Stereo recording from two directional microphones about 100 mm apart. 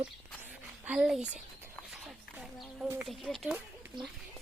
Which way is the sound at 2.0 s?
5° right (ahead or behind).